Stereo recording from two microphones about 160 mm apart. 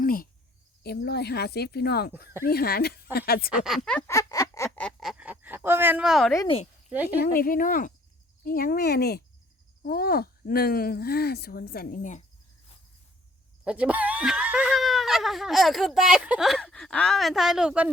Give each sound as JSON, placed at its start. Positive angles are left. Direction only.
{"t": 0.0, "sound": "cricket", "side_deg": 60}
{"t": 0.8, "sound": "speech", "side_deg": 85}
{"t": 3.5, "sound": "speech", "side_deg": -5}
{"t": 3.8, "sound": "a sound", "side_deg": 10}
{"t": 4.1, "sound": "a sound", "side_deg": 20}
{"t": 4.8, "sound": "a sound", "side_deg": 5}
{"t": 6.9, "sound": "speech", "side_deg": -10}
{"t": 7.2, "sound": "speech", "side_deg": 65}
{"t": 13.7, "sound": "speech", "side_deg": -10}